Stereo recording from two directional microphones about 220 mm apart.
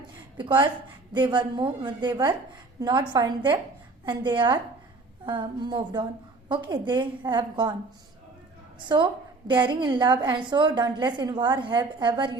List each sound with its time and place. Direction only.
0.3 s a woman's voice: 20° right (ahead or behind)
9.5 s a woman's voice: 20° right (ahead or behind)